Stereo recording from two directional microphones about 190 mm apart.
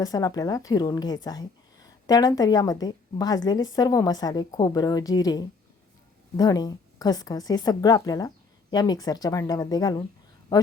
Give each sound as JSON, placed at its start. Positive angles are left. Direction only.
{"t": 0.0, "sound": "speech", "side_deg": 20}